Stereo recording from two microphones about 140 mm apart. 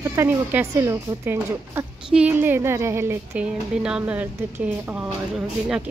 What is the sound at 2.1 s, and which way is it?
A woman's voice, 10° right (ahead or behind).